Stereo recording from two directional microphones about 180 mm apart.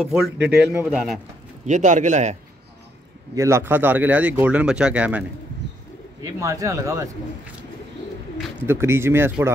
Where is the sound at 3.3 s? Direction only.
15° right (ahead or behind).